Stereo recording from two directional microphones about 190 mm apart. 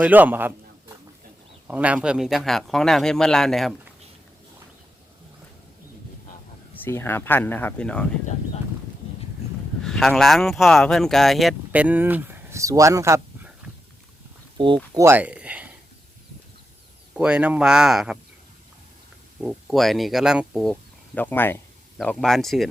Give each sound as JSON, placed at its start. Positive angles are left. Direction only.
{"t": 0.0, "sound": "a man's voice", "side_deg": -10}
{"t": 6.8, "sound": "speech", "side_deg": 10}
{"t": 9.8, "sound": "speech", "side_deg": 0}
{"t": 14.6, "sound": "speech", "side_deg": -25}
{"t": 14.9, "sound": "speech", "side_deg": -10}
{"t": 17.2, "sound": "a man's voice", "side_deg": -5}
{"t": 19.4, "sound": "a man's voice", "side_deg": -5}
{"t": 21.2, "sound": "a man's voice", "side_deg": 10}